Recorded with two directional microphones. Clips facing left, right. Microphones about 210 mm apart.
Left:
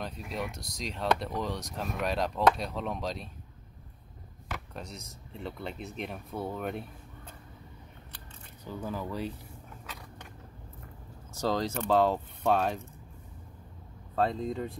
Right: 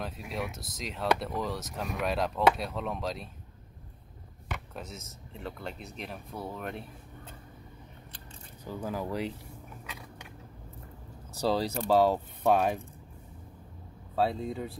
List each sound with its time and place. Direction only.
0.0 s speech: centre (ahead or behind)
4.5 s speech: centre (ahead or behind)
8.6 s speech: 10° right (ahead or behind)
11.6 s speech: 35° right (ahead or behind)
11.9 s speech: 10° right (ahead or behind)
14.1 s speech: 5° right (ahead or behind)